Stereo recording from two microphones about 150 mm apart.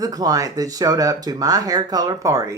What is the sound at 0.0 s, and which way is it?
Speech, 25° right (ahead or behind).